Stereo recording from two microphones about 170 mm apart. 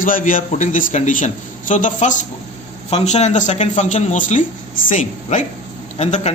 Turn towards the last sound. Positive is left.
turn(degrees=40)  # may be behind; listen again after turning